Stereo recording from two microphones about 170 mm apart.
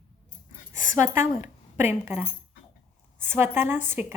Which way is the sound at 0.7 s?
50° left (ahead or behind).